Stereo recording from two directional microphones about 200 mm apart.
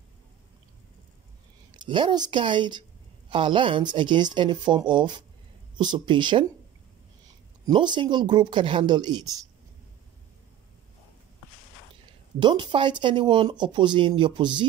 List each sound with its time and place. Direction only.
1.7 s speech: 25° right (ahead or behind)
7.6 s speech: 20° right (ahead or behind)
12.4 s speech: 25° right (ahead or behind)